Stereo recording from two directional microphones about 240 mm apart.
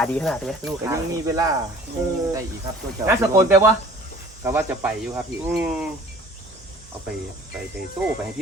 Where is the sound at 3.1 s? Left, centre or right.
Centre.